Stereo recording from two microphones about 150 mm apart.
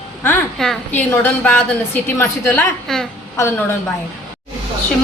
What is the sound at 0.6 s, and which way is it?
A woman's voice, 5° left (ahead or behind).